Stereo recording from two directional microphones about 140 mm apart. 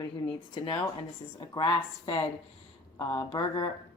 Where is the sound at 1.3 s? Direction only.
35° left (ahead or behind).